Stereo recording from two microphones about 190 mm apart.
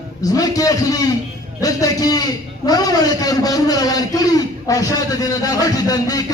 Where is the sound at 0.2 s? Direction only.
20° left (ahead or behind).